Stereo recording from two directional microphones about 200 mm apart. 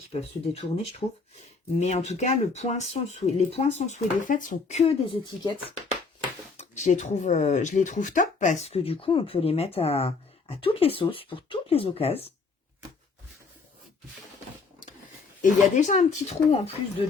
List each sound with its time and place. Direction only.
0.1 s speech: 30° left (ahead or behind)
6.6 s speech: 35° left (ahead or behind)
15.7 s speech: 40° left (ahead or behind)